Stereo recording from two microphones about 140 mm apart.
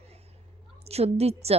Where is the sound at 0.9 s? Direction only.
50° right (ahead or behind).